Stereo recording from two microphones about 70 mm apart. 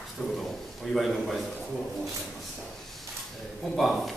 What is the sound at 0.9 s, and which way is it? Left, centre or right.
Speech, centre.